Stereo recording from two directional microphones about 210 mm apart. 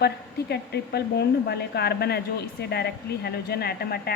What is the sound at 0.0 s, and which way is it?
Speech, 50° left (ahead or behind).